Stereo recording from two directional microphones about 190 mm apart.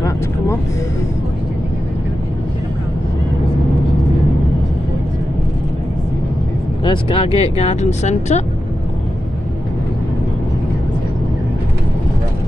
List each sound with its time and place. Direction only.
6.8 s speech: 25° left (ahead or behind)